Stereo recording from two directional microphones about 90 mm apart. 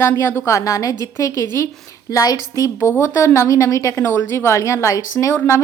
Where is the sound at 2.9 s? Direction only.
30° left (ahead or behind).